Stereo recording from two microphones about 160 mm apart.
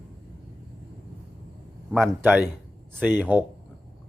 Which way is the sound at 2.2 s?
10° right (ahead or behind).